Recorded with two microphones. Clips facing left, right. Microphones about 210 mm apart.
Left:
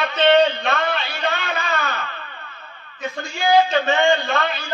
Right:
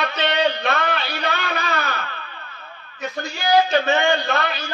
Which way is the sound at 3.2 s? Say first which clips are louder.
Left 2 dB; 40° right (ahead or behind).